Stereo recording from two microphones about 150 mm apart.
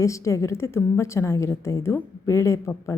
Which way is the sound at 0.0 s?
20° left (ahead or behind).